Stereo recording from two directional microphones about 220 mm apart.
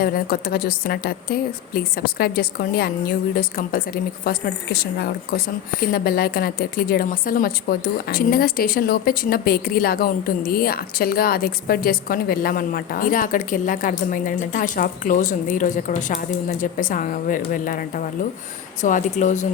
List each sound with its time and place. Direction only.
0.0 s a woman's voice: 40° left (ahead or behind)